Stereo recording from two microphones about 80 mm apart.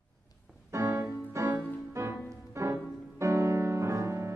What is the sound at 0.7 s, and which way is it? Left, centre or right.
Music, right.